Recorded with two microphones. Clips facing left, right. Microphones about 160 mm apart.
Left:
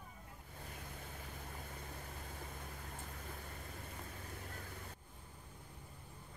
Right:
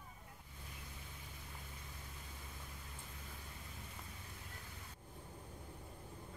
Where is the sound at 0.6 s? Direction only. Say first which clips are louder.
Left 6 dB; 55° left (ahead or behind).